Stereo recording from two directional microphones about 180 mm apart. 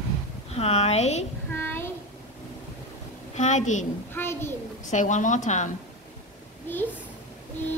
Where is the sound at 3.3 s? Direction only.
40° left (ahead or behind).